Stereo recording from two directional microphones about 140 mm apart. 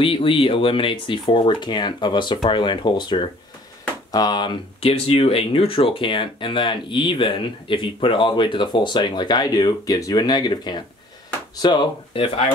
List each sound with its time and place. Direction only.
0.0 s speech: 40° left (ahead or behind)